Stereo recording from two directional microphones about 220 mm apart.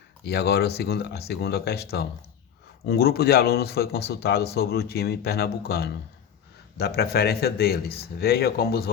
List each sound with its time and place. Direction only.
0.3 s speech: 45° left (ahead or behind)